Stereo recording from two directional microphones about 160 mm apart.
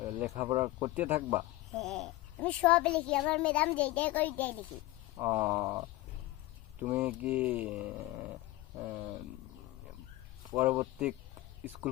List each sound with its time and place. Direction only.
0.0 s a sound: 15° right (ahead or behind)
0.5 s speech: 15° right (ahead or behind)
1.7 s a child's voice: centre (ahead or behind)
5.1 s cat: 20° right (ahead or behind)
6.7 s speech: 10° right (ahead or behind)
10.6 s speech: 10° right (ahead or behind)